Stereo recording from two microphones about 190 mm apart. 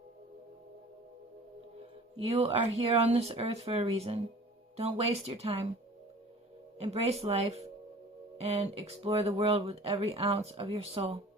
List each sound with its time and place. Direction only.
2.1 s speech: 30° right (ahead or behind)
6.7 s speech: 35° right (ahead or behind)